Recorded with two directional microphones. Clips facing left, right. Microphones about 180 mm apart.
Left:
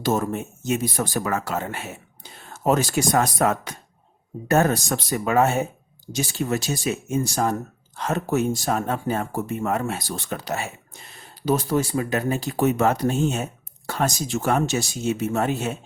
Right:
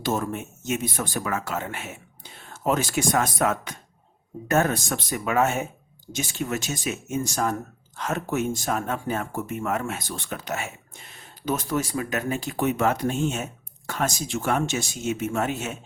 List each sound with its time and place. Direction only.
0.0 s speech: 40° left (ahead or behind)